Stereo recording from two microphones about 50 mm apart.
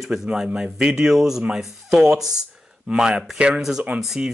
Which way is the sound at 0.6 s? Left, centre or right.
Centre.